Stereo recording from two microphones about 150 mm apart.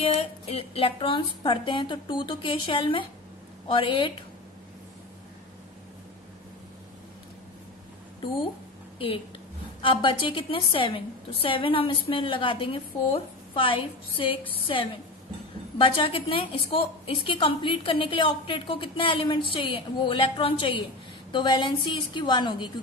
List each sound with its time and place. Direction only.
0.0 s a woman's voice: 40° left (ahead or behind)
9.8 s a woman's voice: 35° left (ahead or behind)
15.8 s a woman's voice: 35° left (ahead or behind)